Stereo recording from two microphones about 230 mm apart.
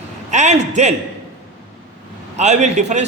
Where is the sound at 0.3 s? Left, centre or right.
Right.